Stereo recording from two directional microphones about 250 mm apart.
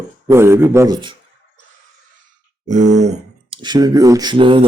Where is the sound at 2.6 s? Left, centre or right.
Right.